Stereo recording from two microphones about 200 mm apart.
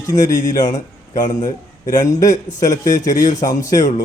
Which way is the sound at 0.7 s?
35° left (ahead or behind).